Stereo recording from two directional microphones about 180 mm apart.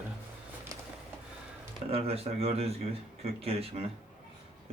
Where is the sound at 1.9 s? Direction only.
35° right (ahead or behind).